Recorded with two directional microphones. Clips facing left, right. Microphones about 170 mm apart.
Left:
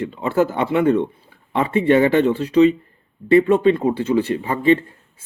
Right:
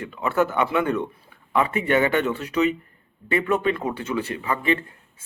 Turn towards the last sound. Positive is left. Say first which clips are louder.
# left 7 dB
turn(degrees=30)  # may be behind; listen again after turning